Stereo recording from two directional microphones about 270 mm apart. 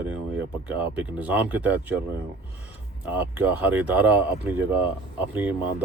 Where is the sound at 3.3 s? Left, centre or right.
Centre.